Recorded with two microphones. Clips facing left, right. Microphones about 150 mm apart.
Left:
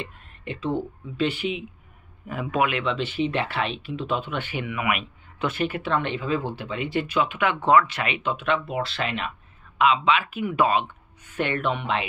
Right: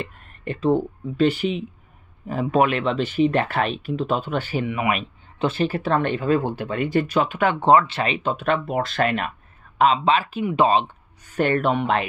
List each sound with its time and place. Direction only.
0.0 s speech: 45° right (ahead or behind)
9.8 s speech: 40° right (ahead or behind)
10.4 s speech: 25° right (ahead or behind); by 12.1 s 45° right (ahead or behind)